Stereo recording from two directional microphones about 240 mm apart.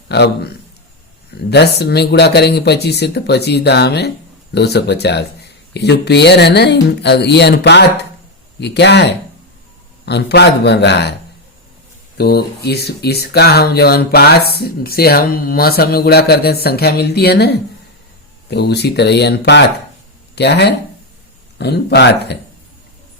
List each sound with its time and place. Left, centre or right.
0.1 s speech: left
12.1 s speech: left